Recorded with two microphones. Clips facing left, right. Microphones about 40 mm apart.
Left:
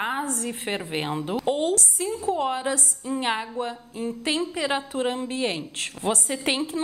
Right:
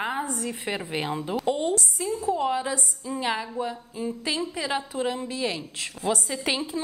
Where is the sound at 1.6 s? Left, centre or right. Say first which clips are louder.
Left 2 dB; left.